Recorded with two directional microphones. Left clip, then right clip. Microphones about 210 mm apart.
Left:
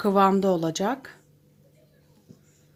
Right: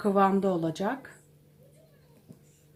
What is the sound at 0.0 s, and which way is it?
Speech, 50° left (ahead or behind).